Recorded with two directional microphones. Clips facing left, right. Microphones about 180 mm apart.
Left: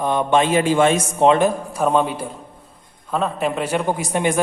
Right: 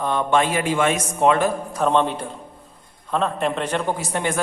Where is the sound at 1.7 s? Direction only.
10° left (ahead or behind).